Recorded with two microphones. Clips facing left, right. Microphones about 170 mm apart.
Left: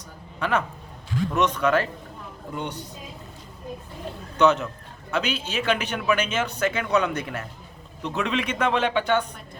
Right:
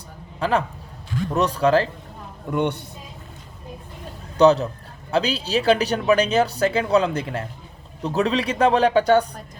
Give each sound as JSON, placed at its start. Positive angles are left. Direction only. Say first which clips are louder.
{"t": 0.3, "sound": "speech", "louder": "right 3 dB", "side_deg": -30}
{"t": 2.5, "sound": "a man's voice", "louder": "right 9 dB", "side_deg": -65}
{"t": 4.4, "sound": "speech", "louder": "right 5 dB", "side_deg": -35}